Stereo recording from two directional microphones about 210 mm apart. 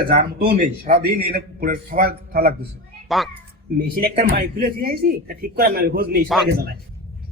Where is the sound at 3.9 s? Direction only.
45° right (ahead or behind).